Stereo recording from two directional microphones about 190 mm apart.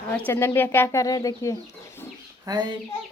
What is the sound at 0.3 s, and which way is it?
Speech, 10° left (ahead or behind).